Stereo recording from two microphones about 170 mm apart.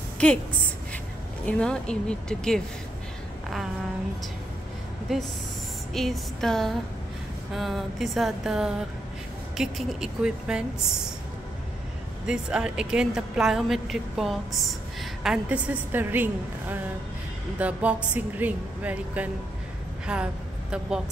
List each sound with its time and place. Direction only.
1.4 s a woman's voice: 5° left (ahead or behind)
5.9 s a woman's voice: centre (ahead or behind)
12.3 s a woman's voice: 5° right (ahead or behind)